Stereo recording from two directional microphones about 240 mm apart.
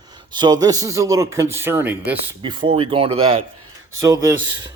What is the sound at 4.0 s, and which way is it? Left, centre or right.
Mechanisms, centre.